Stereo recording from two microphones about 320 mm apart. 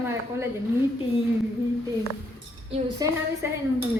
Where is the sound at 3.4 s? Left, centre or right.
Centre.